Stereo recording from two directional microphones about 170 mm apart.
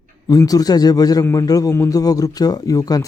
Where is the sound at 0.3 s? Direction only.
20° left (ahead or behind).